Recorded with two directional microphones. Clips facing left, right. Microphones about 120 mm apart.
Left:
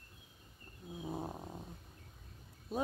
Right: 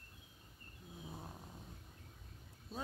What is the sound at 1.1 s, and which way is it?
Cat, 45° left (ahead or behind).